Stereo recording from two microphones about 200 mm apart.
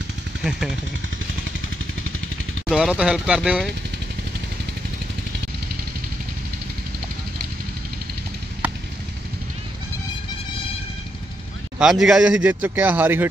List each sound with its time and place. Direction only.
0.4 s speech: centre (ahead or behind)
2.7 s speech: 5° right (ahead or behind)
11.8 s a man's voice: centre (ahead or behind)